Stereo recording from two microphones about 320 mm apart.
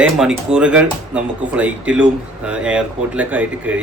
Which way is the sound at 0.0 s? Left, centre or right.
Centre.